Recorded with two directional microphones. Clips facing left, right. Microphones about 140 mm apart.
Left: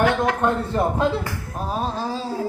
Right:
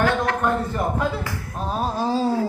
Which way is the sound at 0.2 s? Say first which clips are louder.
Left 1 dB; 25° left (ahead or behind).